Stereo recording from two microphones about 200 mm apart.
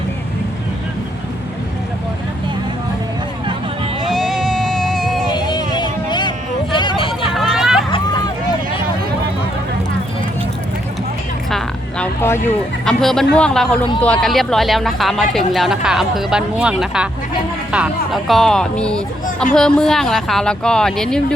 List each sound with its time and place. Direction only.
4.1 s music: centre (ahead or behind)
5.3 s a sound: 20° left (ahead or behind)
7.3 s vehicle: centre (ahead or behind)
7.9 s vehicle: 20° left (ahead or behind)
11.5 s a sound: 10° left (ahead or behind)
12.8 s speech: centre (ahead or behind)